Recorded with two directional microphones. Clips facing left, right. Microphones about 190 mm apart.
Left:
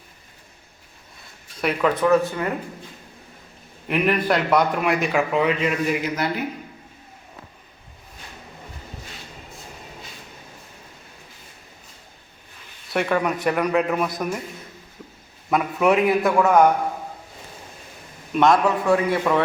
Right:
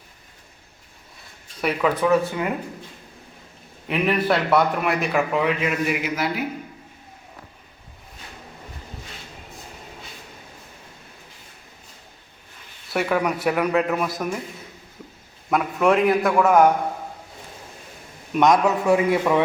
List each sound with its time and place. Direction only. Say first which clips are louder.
1.6 s a man's voice: left 1 dB; 5° right (ahead or behind)
3.8 s a man's voice: even; centre (ahead or behind)
12.9 s a man's voice: even; 5° right (ahead or behind)
15.4 s a man's voice: even; centre (ahead or behind)
18.3 s a man's voice: even; 15° right (ahead or behind)